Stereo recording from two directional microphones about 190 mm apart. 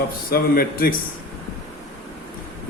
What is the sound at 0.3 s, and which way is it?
Speech, 50° left (ahead or behind).